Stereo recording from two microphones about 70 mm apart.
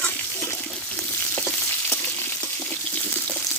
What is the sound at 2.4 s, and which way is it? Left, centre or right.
Water, left.